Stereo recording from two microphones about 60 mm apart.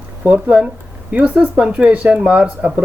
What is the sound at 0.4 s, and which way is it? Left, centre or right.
Speech, right.